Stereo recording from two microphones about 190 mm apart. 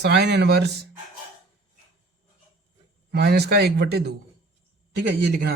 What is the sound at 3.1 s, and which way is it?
Speech, 60° right (ahead or behind).